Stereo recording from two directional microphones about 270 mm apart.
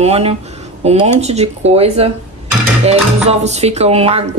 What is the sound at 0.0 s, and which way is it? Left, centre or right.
A woman's voice, right.